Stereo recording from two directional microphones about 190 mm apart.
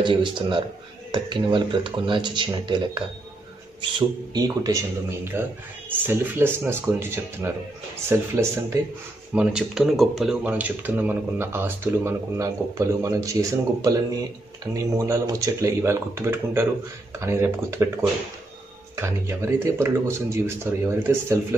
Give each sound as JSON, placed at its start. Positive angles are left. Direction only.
{"t": 0.0, "sound": "speech", "side_deg": -25}
{"t": 4.3, "sound": "speech", "side_deg": -20}
{"t": 18.9, "sound": "speech", "side_deg": -15}